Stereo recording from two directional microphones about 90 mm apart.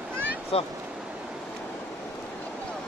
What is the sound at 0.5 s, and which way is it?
Speech, 90° left.